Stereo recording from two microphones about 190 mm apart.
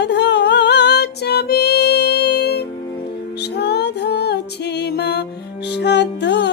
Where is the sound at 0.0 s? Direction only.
65° left (ahead or behind).